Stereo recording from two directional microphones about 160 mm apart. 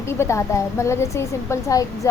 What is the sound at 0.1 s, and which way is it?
A woman's voice, 15° left (ahead or behind).